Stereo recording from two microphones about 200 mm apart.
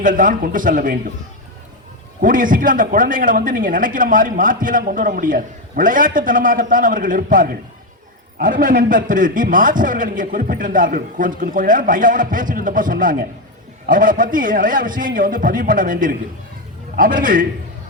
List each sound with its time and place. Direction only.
0.0 s a man's voice: 40° right (ahead or behind)
2.2 s a man's voice: 40° right (ahead or behind)